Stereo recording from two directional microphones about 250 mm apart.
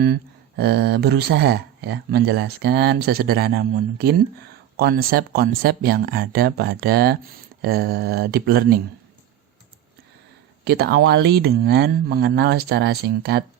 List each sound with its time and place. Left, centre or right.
0.0 s speech: right
10.6 s speech: right